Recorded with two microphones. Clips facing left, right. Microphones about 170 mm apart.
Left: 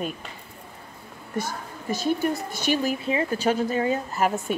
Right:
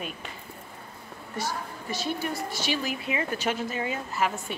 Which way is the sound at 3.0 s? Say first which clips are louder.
Left 4 dB; 30° left (ahead or behind).